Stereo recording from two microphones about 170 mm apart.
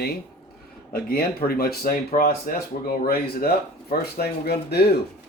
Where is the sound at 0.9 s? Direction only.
60° left (ahead or behind).